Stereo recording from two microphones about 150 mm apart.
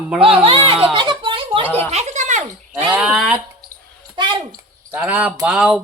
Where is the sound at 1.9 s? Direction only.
50° right (ahead or behind).